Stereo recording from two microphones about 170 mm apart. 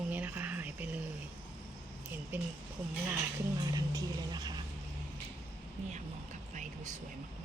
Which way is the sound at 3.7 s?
20° right (ahead or behind).